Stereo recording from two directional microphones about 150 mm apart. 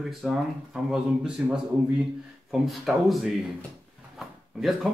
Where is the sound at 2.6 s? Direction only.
Centre (ahead or behind).